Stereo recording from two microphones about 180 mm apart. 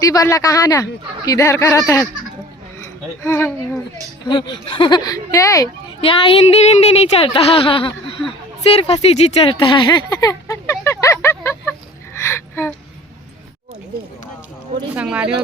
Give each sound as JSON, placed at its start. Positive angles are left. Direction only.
{"t": 0.0, "sound": "speech", "side_deg": 20}
{"t": 3.2, "sound": "speech", "side_deg": 10}
{"t": 4.3, "sound": "speech", "side_deg": 25}
{"t": 6.0, "sound": "a woman's voice", "side_deg": 30}
{"t": 12.2, "sound": "a sound", "side_deg": 15}
{"t": 14.9, "sound": "speech", "side_deg": -5}